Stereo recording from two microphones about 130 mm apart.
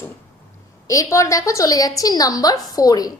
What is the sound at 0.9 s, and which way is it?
A woman's voice, 25° left (ahead or behind).